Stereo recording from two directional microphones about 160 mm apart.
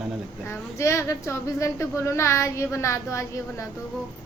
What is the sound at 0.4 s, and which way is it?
A woman's voice, 15° left (ahead or behind).